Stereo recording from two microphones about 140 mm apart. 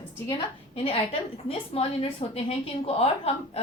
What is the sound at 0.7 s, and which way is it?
A woman's voice, 45° left (ahead or behind).